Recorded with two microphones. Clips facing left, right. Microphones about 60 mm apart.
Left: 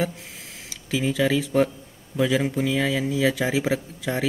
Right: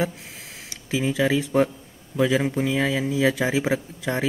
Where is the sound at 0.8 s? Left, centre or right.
Centre.